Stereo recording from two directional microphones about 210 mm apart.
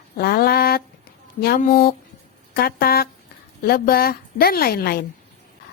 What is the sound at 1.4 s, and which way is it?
A woman's voice, 45° left (ahead or behind).